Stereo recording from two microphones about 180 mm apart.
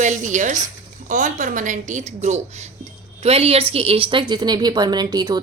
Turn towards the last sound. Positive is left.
turn(degrees=-20)  # may be behind; listen again after turning